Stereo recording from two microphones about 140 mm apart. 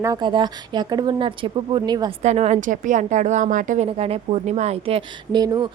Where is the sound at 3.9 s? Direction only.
45° right (ahead or behind).